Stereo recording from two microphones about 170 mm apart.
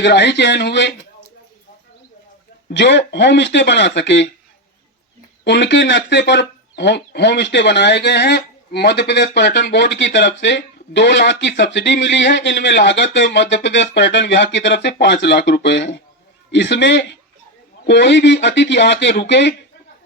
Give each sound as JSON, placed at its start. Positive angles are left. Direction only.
{"t": 0.0, "sound": "speech", "side_deg": 90}
{"t": 2.6, "sound": "speech", "side_deg": 90}
{"t": 5.5, "sound": "speech", "side_deg": 90}